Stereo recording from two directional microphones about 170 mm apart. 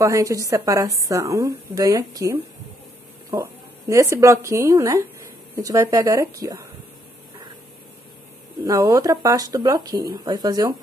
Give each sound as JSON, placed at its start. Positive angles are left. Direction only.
{"t": 0.0, "sound": "a woman's voice", "side_deg": -20}
{"t": 8.6, "sound": "a woman's voice", "side_deg": -20}